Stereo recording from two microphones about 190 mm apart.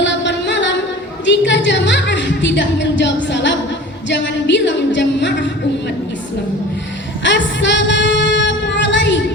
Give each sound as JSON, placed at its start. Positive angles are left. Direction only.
{"t": 0.0, "sound": "music", "side_deg": 70}
{"t": 1.2, "sound": "speech", "side_deg": 70}
{"t": 3.2, "sound": "a sound", "side_deg": 70}
{"t": 4.1, "sound": "singing", "side_deg": 70}
{"t": 7.3, "sound": "singing", "side_deg": 70}